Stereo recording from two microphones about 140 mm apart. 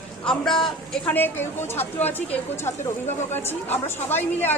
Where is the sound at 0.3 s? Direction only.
5° left (ahead or behind).